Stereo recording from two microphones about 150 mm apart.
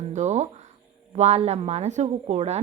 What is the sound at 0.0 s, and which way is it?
Speech, 50° right (ahead or behind).